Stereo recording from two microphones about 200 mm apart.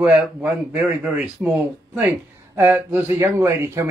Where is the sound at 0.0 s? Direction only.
5° right (ahead or behind).